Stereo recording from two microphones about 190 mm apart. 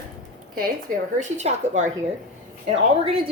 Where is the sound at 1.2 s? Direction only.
40° right (ahead or behind).